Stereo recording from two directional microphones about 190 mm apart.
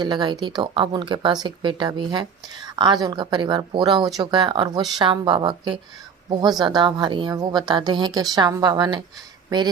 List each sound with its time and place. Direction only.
0.0 s a woman's voice: 25° right (ahead or behind)